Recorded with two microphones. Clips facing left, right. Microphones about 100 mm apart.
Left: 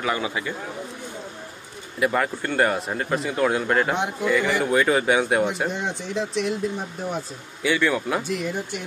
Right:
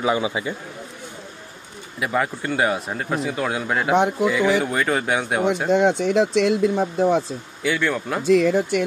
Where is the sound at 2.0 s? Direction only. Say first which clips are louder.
Left 1 dB; centre (ahead or behind).